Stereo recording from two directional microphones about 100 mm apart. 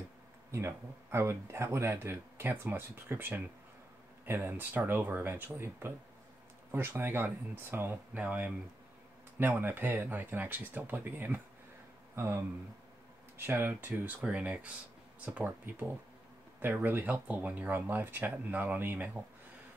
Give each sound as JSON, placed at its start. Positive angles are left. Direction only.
{"t": 0.5, "sound": "speech", "side_deg": -25}
{"t": 13.4, "sound": "speech", "side_deg": -20}